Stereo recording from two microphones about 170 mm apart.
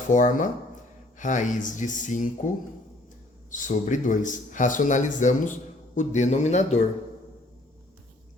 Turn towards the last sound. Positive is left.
turn(degrees=40)  # may be behind; listen again after turning